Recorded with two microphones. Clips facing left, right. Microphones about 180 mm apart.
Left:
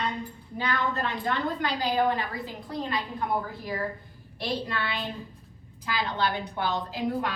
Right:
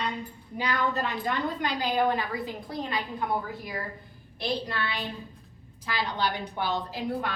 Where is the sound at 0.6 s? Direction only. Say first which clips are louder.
Right 1 dB; 10° right (ahead or behind).